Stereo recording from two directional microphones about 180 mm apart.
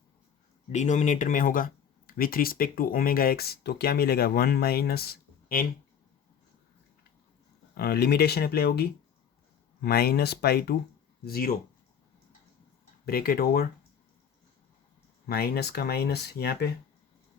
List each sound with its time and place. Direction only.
0.7 s speech: 40° left (ahead or behind); by 5.6 s 55° left (ahead or behind)
7.8 s speech: 60° left (ahead or behind)
13.1 s speech: 55° left (ahead or behind)
15.3 s speech: 60° left (ahead or behind)